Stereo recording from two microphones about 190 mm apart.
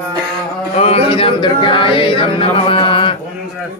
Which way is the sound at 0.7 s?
35° left (ahead or behind).